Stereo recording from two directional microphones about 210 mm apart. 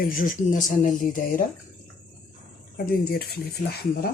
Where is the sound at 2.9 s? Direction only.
45° left (ahead or behind).